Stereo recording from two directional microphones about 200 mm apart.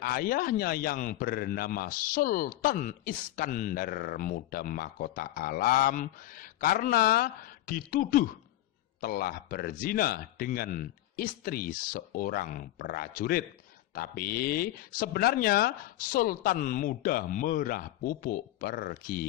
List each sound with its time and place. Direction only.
0.0 s a man's voice: 45° left (ahead or behind)